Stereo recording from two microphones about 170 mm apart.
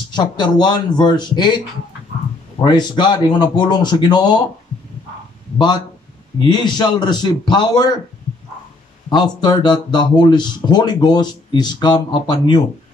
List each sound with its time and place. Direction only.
0.1 s speech: 25° left (ahead or behind)
2.6 s speech: 25° left (ahead or behind)
6.5 s speech: 25° left (ahead or behind)
9.1 s speech: 25° left (ahead or behind)